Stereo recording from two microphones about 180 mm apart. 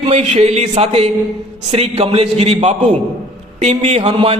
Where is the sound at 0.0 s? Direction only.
35° right (ahead or behind).